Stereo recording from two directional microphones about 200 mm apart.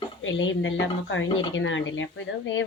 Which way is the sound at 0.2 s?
70° left (ahead or behind).